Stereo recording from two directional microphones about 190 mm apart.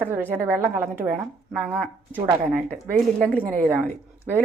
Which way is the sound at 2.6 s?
5° left (ahead or behind).